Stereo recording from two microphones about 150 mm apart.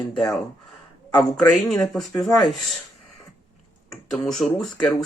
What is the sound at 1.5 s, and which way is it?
Speech, 5° left (ahead or behind).